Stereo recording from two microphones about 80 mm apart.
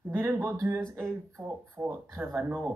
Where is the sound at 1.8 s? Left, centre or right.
Right.